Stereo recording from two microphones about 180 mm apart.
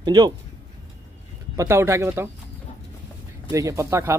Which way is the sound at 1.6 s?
15° right (ahead or behind).